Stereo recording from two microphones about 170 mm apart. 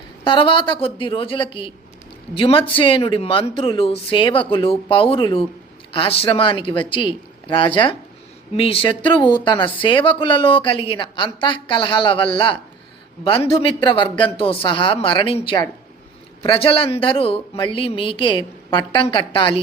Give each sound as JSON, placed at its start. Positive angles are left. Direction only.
{"t": 0.3, "sound": "speech", "side_deg": 30}